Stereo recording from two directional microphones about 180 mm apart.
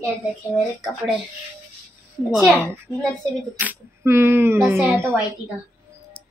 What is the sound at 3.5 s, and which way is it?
Speech, 10° right (ahead or behind).